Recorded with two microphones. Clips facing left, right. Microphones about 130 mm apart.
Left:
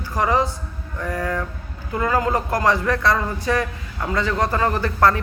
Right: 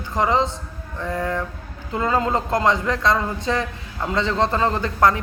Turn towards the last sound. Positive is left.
turn(degrees=-20)  # may be behind; listen again after turning